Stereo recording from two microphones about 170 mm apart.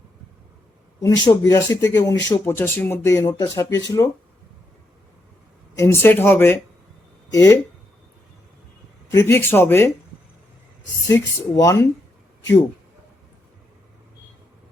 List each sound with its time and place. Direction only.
1.0 s speech: 20° left (ahead or behind)
5.7 s speech: 15° left (ahead or behind)
9.0 s speech: 15° left (ahead or behind)
11.1 s speech: 20° left (ahead or behind)